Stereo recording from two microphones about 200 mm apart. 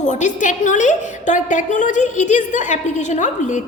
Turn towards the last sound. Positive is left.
turn(degrees=35)  # may be behind; listen again after turning